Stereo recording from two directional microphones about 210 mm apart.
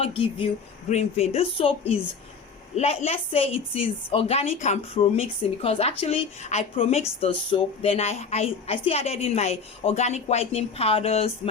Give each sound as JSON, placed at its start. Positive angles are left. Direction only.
{"t": 0.0, "sound": "a woman's voice", "side_deg": 25}
{"t": 2.7, "sound": "a woman's voice", "side_deg": 30}